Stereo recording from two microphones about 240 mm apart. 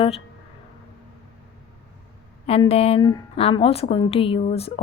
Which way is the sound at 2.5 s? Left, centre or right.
Left.